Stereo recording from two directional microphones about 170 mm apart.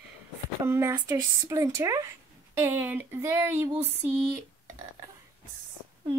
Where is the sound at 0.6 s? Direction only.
15° right (ahead or behind).